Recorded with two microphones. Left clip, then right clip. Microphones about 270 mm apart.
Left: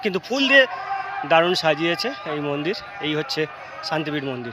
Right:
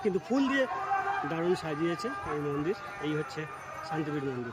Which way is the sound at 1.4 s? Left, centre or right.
Centre.